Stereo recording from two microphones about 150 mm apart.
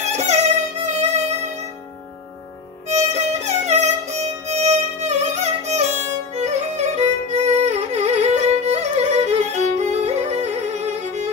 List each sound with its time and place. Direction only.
0.1 s music: 45° right (ahead or behind)
2.9 s music: 45° right (ahead or behind)